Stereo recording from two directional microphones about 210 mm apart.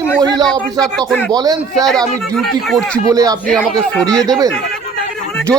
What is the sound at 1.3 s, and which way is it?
Speech, 20° right (ahead or behind).